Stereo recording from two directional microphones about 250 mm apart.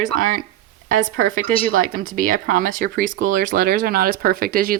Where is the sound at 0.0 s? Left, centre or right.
Right.